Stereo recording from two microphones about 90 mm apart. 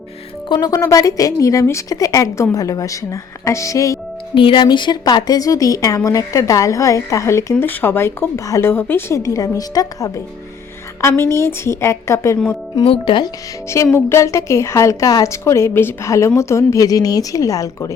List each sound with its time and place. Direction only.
0.4 s speech: 55° left (ahead or behind)
0.7 s a woman's voice: 40° left (ahead or behind)
4.4 s a woman's voice: 70° left (ahead or behind); by 7.5 s 35° left (ahead or behind)
7.6 s a woman's voice: 25° left (ahead or behind); by 10.1 s 40° left (ahead or behind)
11.0 s a woman's voice: 30° left (ahead or behind)
12.8 s speech: 75° left (ahead or behind)
13.9 s a woman's voice: 30° left (ahead or behind)